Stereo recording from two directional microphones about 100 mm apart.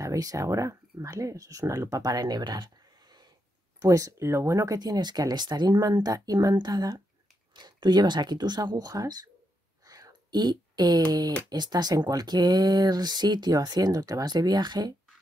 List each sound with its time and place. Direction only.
0.0 s speech: 35° right (ahead or behind)
9.8 s a sound: 40° right (ahead or behind)
11.1 s speech: 40° right (ahead or behind)